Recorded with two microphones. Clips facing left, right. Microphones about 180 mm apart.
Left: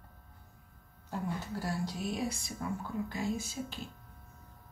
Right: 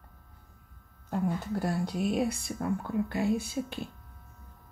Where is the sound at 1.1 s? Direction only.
55° right (ahead or behind).